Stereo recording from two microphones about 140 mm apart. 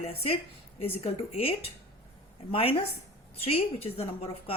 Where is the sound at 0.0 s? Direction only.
45° left (ahead or behind).